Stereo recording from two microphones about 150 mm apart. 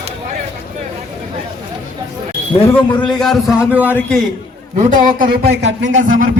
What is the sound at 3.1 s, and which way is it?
Speech, centre (ahead or behind).